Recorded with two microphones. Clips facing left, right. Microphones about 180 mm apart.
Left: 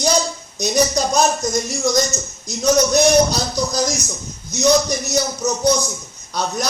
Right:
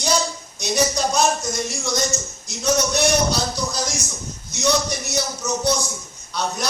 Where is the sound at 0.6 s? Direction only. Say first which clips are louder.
Left 3 dB; 40° left (ahead or behind).